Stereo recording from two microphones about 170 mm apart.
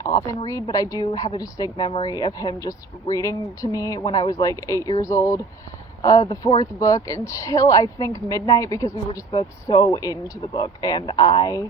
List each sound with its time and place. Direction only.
0.0 s speech: 20° left (ahead or behind)